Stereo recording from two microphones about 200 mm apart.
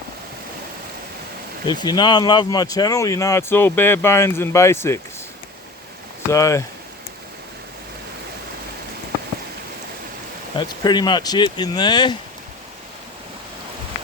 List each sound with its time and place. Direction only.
1.6 s speech: 20° left (ahead or behind)
6.3 s speech: 15° left (ahead or behind)
10.6 s speech: 20° left (ahead or behind)